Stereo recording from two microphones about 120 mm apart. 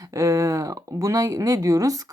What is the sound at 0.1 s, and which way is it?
A woman's voice, 25° right (ahead or behind).